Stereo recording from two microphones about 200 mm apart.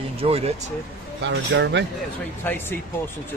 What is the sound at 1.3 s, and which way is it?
Speech, 65° right (ahead or behind).